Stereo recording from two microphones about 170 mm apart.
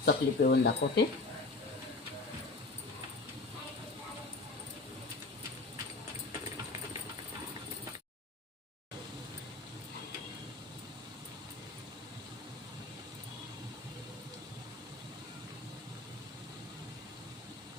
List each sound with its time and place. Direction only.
0.0 s speech: 80° left